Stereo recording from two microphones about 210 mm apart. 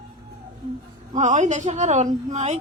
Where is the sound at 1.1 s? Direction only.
35° right (ahead or behind).